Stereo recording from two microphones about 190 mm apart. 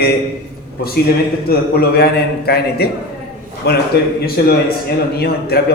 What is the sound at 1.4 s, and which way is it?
A man's voice, 55° left (ahead or behind).